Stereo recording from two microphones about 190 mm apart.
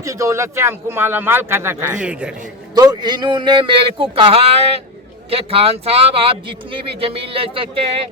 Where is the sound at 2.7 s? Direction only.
20° right (ahead or behind).